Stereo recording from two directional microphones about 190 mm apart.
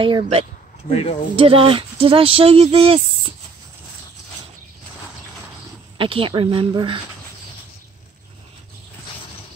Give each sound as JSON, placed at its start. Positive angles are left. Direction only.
{"t": 0.0, "sound": "speech", "side_deg": -30}
{"t": 0.8, "sound": "speech", "side_deg": 30}
{"t": 1.3, "sound": "speech", "side_deg": -30}
{"t": 5.9, "sound": "speech", "side_deg": -30}